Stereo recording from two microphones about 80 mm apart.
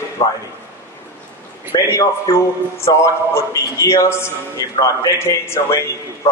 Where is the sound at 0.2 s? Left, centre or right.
Left.